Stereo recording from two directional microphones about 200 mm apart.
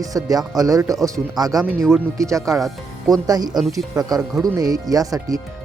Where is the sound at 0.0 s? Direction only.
15° right (ahead or behind).